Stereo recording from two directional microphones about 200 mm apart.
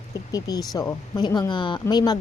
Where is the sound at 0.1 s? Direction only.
20° left (ahead or behind).